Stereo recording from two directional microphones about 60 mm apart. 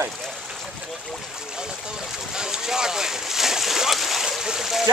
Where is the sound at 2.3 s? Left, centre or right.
Centre.